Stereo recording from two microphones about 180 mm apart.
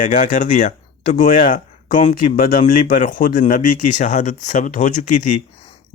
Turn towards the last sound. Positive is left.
turn(degrees=45)  # may be behind; listen again after turning